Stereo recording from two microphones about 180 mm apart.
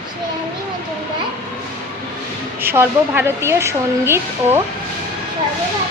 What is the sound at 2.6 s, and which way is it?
A woman's voice, 10° right (ahead or behind).